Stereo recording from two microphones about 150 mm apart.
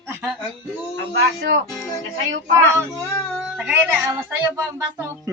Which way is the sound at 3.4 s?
5° right (ahead or behind).